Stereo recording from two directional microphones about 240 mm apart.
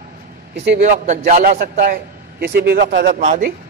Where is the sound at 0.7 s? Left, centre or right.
Right.